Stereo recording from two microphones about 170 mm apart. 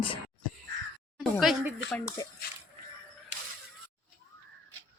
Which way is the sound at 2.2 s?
20° left (ahead or behind).